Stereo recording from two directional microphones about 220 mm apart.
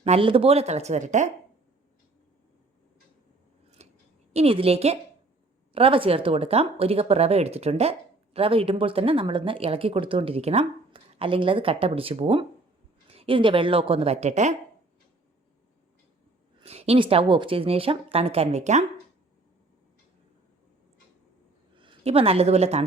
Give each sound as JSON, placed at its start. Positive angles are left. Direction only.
{"t": 0.0, "sound": "speech", "side_deg": -25}
{"t": 3.8, "sound": "scissors", "side_deg": -30}
{"t": 4.4, "sound": "speech", "side_deg": -25}
{"t": 16.6, "sound": "speech", "side_deg": -25}
{"t": 21.8, "sound": "a woman's voice", "side_deg": -25}